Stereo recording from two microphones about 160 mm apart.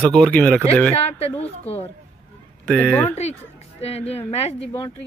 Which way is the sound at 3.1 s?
40° left (ahead or behind).